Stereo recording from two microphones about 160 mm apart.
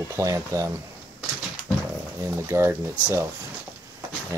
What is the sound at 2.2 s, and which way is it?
Speech, 15° right (ahead or behind).